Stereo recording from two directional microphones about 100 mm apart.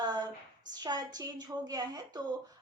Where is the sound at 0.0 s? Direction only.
45° right (ahead or behind).